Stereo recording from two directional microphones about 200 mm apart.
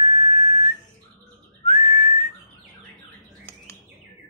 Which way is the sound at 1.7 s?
35° left (ahead or behind).